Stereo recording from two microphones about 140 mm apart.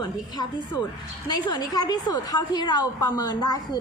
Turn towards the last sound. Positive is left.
turn(degrees=30)  # may be behind; listen again after turning